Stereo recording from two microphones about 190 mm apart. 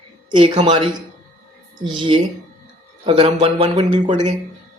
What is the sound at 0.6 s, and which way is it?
Speech, 25° right (ahead or behind).